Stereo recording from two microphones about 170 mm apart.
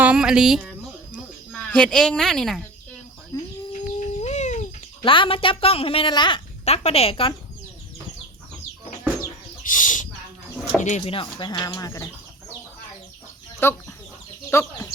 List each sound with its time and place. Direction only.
0.0 s a sound: 5° right (ahead or behind)
1.7 s a woman's voice: 5° left (ahead or behind)
3.3 s chicken: 20° left (ahead or behind)
3.7 s chicken: 40° left (ahead or behind)
5.0 s a woman's voice: 30° left (ahead or behind)
9.6 s chicken: 50° left (ahead or behind)
10.8 s speech: 45° left (ahead or behind); by 12.0 s 20° left (ahead or behind)
13.6 s speech: 15° left (ahead or behind)